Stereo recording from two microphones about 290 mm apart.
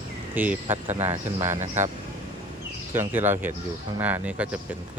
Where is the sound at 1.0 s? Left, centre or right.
Right.